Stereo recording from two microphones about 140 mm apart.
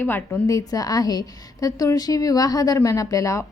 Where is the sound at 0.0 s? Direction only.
15° left (ahead or behind).